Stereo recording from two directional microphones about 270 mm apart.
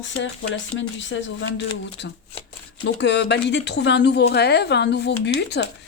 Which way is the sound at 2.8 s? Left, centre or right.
Left.